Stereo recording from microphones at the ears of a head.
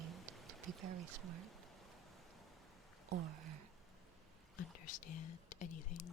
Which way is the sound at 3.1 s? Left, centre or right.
Right.